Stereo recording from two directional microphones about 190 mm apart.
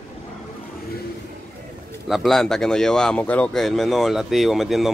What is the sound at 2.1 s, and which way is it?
Speech, centre (ahead or behind).